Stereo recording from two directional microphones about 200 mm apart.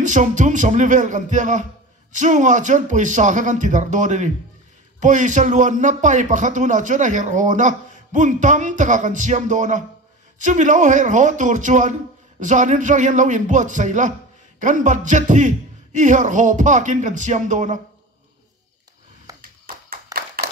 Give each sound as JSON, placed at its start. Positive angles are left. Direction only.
{"t": 0.0, "sound": "speech", "side_deg": -40}
{"t": 19.3, "sound": "a sound", "side_deg": -15}
{"t": 19.6, "sound": "clapping", "side_deg": -45}